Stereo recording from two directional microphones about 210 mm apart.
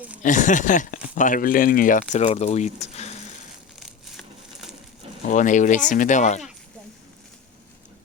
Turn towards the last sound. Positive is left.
turn(degrees=35)  # may be behind; listen again after turning